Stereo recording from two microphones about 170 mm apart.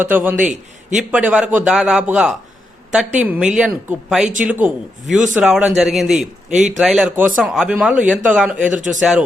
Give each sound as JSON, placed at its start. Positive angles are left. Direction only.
{"t": 0.0, "sound": "speech", "side_deg": -10}
{"t": 0.3, "sound": "a man's voice", "side_deg": -45}
{"t": 0.9, "sound": "speech", "side_deg": -5}